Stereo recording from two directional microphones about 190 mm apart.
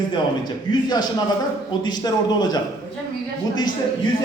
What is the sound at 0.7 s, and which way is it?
A man's voice, 20° left (ahead or behind).